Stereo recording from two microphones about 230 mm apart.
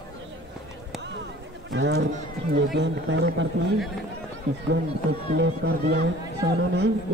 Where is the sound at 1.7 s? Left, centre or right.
Right.